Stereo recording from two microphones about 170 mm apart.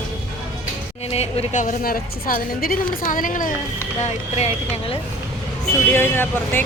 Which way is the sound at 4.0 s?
40° left (ahead or behind).